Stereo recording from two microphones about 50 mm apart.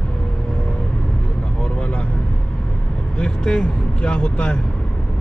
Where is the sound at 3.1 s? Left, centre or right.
Centre.